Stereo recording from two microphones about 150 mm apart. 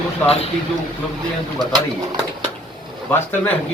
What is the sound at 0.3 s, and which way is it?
Speech, 40° left (ahead or behind).